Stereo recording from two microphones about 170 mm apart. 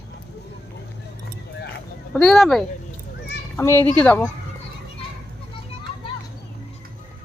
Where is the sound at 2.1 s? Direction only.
Centre (ahead or behind).